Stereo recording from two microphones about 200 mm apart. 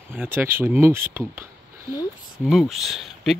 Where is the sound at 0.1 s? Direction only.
10° right (ahead or behind).